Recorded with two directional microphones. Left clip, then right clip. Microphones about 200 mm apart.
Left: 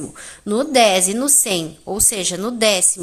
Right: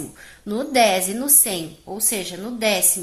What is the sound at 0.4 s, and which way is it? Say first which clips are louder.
A woman's voice: left 3 dB; 30° left (ahead or behind).